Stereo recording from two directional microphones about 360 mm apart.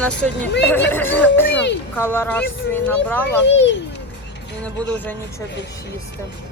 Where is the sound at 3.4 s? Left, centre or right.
Left.